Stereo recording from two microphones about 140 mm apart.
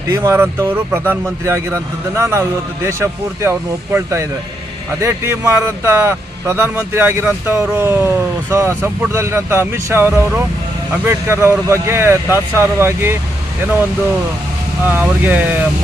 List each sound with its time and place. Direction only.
0.1 s speech: 20° right (ahead or behind)
14.8 s speech: 15° right (ahead or behind)